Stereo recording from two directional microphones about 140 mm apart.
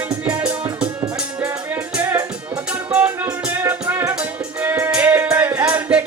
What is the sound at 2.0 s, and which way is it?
Music, 20° right (ahead or behind).